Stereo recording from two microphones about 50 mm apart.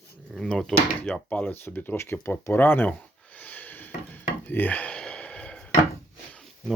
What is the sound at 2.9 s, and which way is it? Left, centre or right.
Dishes, left.